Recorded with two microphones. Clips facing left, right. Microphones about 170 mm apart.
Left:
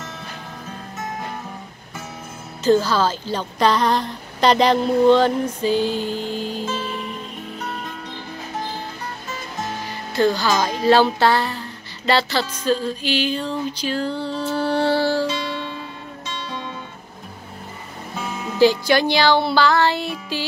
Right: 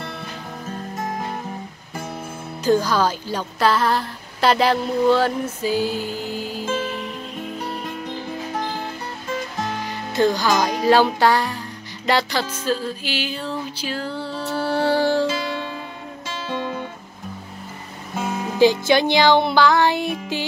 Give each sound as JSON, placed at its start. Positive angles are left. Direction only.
{"t": 2.6, "sound": "speech", "side_deg": -10}
{"t": 10.1, "sound": "speech", "side_deg": -15}
{"t": 12.1, "sound": "music", "side_deg": -15}
{"t": 16.4, "sound": "music", "side_deg": -55}
{"t": 18.6, "sound": "music", "side_deg": -20}